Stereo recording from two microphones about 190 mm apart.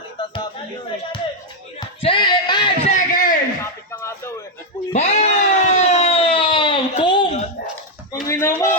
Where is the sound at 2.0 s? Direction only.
25° left (ahead or behind).